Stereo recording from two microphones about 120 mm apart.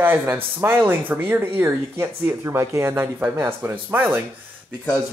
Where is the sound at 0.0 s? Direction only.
15° right (ahead or behind).